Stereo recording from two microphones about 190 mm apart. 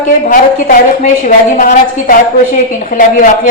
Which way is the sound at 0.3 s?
45° left (ahead or behind).